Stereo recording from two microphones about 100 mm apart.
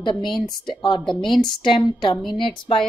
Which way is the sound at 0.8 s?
50° left (ahead or behind).